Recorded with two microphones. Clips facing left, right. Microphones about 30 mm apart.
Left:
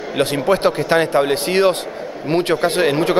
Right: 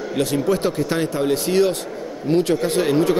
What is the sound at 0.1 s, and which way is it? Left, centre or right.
Speech, left.